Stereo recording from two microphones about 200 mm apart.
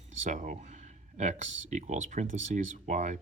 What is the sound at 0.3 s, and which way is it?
Speech, 40° right (ahead or behind).